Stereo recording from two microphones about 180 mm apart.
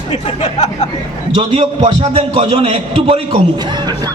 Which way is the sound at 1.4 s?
35° right (ahead or behind).